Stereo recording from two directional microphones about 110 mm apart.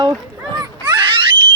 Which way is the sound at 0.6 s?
50° right (ahead or behind).